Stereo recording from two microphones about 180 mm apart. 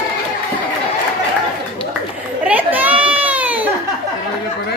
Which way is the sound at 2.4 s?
10° right (ahead or behind).